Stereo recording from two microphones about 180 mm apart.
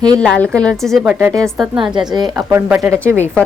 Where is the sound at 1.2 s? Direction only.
20° right (ahead or behind).